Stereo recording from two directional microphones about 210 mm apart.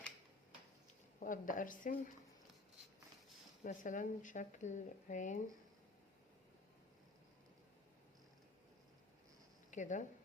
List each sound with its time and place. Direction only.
1.2 s a woman's voice: 40° left (ahead or behind)
3.6 s a woman's voice: 40° left (ahead or behind)
9.7 s a woman's voice: 35° left (ahead or behind)